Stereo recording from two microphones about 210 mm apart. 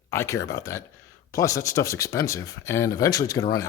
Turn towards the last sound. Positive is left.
turn(degrees=15)  # may be behind; listen again after turning